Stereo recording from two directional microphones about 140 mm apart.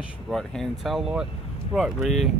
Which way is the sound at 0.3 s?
5° left (ahead or behind).